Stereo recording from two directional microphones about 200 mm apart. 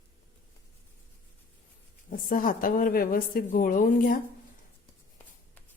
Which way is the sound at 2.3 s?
45° left (ahead or behind).